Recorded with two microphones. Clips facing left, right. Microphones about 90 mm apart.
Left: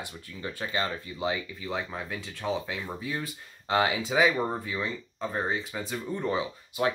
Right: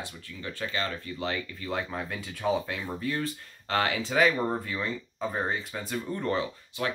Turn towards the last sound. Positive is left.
turn(degrees=10)  # may be behind; listen again after turning